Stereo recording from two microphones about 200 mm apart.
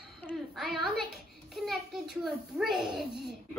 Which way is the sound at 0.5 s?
Centre (ahead or behind).